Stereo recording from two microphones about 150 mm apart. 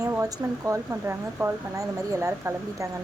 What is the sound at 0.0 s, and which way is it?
Speech, 20° right (ahead or behind).